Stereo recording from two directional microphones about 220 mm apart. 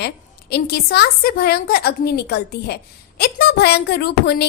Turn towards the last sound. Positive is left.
turn(degrees=50)  # may be behind; listen again after turning